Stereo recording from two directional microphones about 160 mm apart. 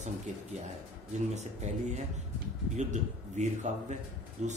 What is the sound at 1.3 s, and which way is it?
Speech, 45° right (ahead or behind).